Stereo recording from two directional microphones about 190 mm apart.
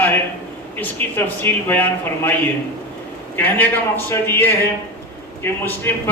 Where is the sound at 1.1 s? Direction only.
10° left (ahead or behind).